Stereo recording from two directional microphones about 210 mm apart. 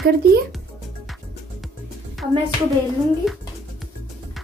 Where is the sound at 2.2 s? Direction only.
Centre (ahead or behind).